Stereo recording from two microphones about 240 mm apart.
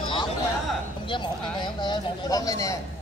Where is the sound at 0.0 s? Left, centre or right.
Centre.